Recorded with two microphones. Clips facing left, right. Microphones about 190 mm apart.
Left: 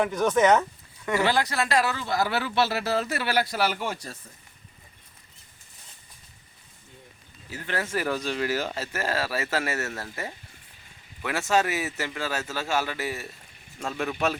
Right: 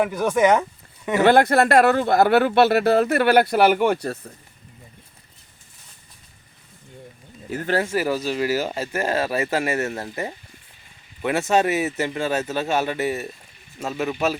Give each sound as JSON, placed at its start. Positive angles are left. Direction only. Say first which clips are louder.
{"t": 0.0, "sound": "speech", "louder": "right 3 dB", "side_deg": -10}
{"t": 1.2, "sound": "speech", "louder": "right 11 dB", "side_deg": -55}
{"t": 7.9, "sound": "a man's voice", "louder": "right 5 dB", "side_deg": -10}
{"t": 13.7, "sound": "speech", "louder": "right 4 dB", "side_deg": -5}